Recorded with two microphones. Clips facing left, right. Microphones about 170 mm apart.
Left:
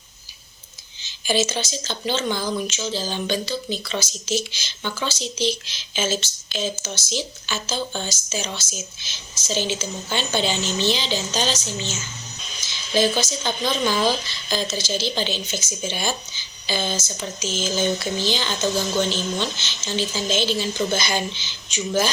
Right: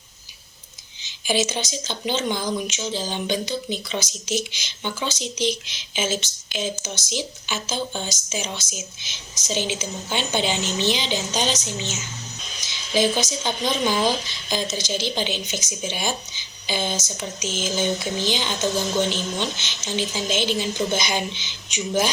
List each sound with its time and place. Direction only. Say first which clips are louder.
1.0 s speech: left 1 dB; 15° right (ahead or behind)